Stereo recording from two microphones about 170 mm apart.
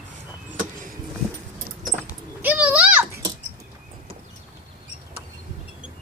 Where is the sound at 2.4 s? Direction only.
10° right (ahead or behind).